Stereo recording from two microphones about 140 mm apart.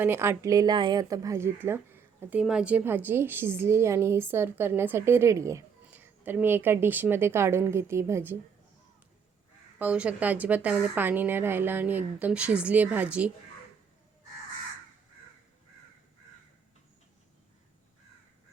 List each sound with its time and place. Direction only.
0.0 s a woman's voice: 15° right (ahead or behind)
2.4 s speech: 5° right (ahead or behind)
9.7 s speech: 10° right (ahead or behind)